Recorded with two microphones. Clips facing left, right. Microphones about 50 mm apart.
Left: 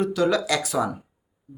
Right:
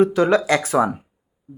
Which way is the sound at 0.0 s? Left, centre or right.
Right.